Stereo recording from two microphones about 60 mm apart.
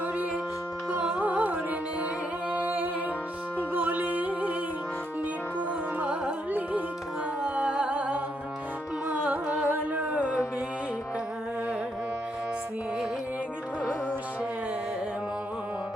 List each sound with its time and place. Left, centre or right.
1.0 s carnatic music: right
2.5 s humming: right
3.8 s music: right
5.5 s carnatic music: right
7.4 s music: centre